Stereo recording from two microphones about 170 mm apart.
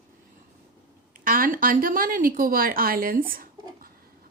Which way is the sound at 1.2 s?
55° right (ahead or behind).